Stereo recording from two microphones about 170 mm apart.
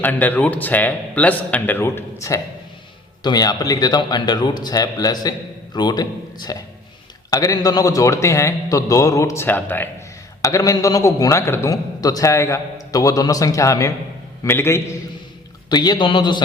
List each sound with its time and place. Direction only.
0.0 s a man's voice: 10° left (ahead or behind); by 16.4 s 25° left (ahead or behind)